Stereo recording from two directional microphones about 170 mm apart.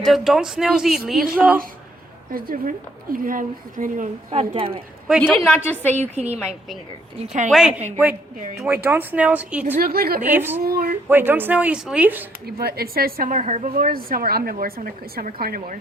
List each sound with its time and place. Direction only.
0.0 s speech: centre (ahead or behind)
2.3 s a woman's voice: 60° right (ahead or behind)
4.3 s a woman's voice: 35° right (ahead or behind)
5.2 s a woman's voice: 5° left (ahead or behind)
5.9 s a woman's voice: 40° right (ahead or behind)
7.5 s speech: 5° right (ahead or behind)
9.8 s a woman's voice: 65° right (ahead or behind)
10.2 s speech: 10° right (ahead or behind)
10.6 s a sound: 60° right (ahead or behind)
11.1 s speech: 10° right (ahead or behind)
12.5 s a woman's voice: 65° right (ahead or behind)